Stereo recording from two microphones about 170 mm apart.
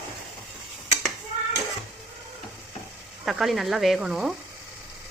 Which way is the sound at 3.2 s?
Centre (ahead or behind).